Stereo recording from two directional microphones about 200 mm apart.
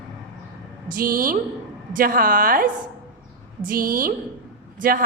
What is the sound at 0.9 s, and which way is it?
A woman's voice, 45° right (ahead or behind).